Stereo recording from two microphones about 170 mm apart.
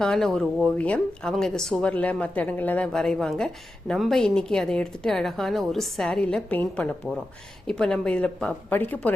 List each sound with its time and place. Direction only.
0.0 s speech: 5° left (ahead or behind)